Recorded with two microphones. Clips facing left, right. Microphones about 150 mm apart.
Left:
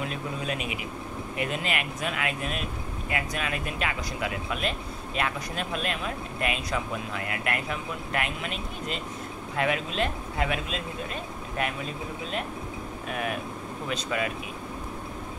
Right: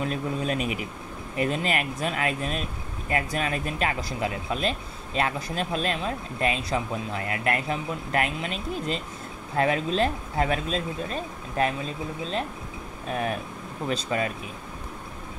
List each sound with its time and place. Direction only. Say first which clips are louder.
0.0 s speech: right 4 dB; 40° right (ahead or behind)
13.1 s speech: right 3 dB; 35° right (ahead or behind)